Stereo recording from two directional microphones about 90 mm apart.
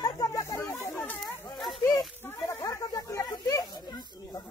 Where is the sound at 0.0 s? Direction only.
40° left (ahead or behind); by 1.1 s 25° left (ahead or behind).